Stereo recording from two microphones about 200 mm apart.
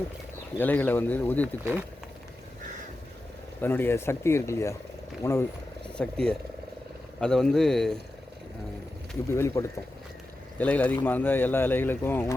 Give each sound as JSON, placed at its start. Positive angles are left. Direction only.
{"t": 0.6, "sound": "speech", "side_deg": 10}
{"t": 3.6, "sound": "speech", "side_deg": 10}
{"t": 9.3, "sound": "speech", "side_deg": 10}